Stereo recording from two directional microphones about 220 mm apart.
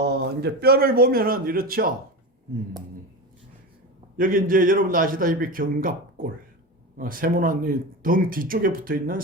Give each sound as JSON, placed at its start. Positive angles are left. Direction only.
{"t": 0.0, "sound": "speech", "side_deg": -45}
{"t": 4.2, "sound": "speech", "side_deg": -40}